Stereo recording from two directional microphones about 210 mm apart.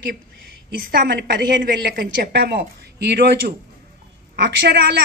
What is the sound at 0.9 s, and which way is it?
A woman's voice, 55° right (ahead or behind).